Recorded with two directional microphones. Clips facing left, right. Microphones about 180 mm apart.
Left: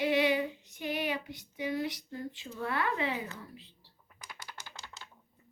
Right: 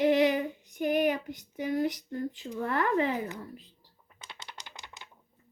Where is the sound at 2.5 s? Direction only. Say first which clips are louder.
Right 5 dB; 45° right (ahead or behind).